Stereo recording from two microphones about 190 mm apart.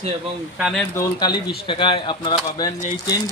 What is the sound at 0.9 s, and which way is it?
Speech, 25° left (ahead or behind).